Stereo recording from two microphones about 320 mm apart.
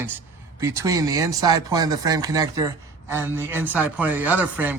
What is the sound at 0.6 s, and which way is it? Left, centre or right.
Speech, centre.